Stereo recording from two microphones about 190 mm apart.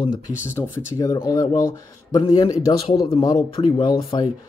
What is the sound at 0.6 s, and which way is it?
Speech, 15° left (ahead or behind).